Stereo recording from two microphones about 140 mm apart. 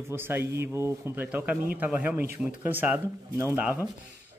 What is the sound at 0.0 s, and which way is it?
Speech, 15° right (ahead or behind).